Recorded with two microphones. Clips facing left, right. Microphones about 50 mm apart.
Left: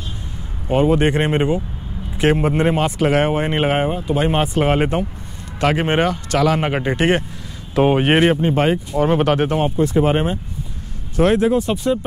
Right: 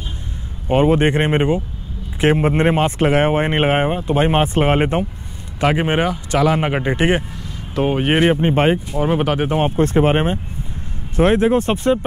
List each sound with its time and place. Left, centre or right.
0.7 s speech: right
5.6 s speech: centre
6.6 s speech: centre
7.7 s speech: centre
8.4 s speech: right
8.9 s speech: centre
9.6 s speech: right
11.5 s speech: right